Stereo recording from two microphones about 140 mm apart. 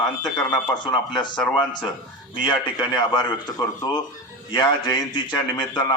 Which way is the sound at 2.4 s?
35° left (ahead or behind).